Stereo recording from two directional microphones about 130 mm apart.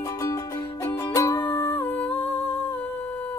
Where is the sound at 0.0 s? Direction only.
25° left (ahead or behind).